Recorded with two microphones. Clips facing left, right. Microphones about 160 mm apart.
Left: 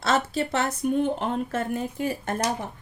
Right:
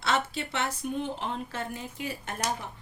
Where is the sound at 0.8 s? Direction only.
50° left (ahead or behind).